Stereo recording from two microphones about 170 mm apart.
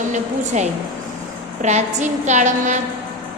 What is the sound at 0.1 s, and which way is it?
A woman's voice, 45° right (ahead or behind).